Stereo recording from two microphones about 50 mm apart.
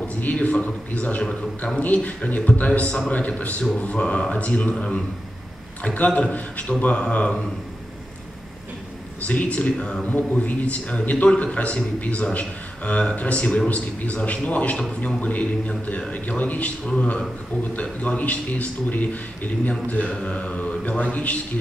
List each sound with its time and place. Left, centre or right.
0.2 s a man's voice: left
9.2 s a man's voice: left
16.8 s a man's voice: centre
18.0 s speech: left
20.2 s mantra: left
21.0 s speech: left